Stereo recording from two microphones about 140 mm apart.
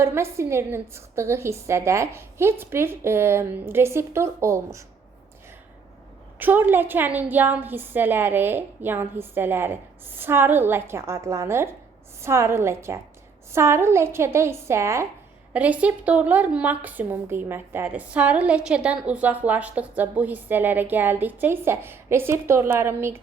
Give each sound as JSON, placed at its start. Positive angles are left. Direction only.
{"t": 0.0, "sound": "a woman's voice", "side_deg": -15}
{"t": 6.4, "sound": "a woman's voice", "side_deg": -15}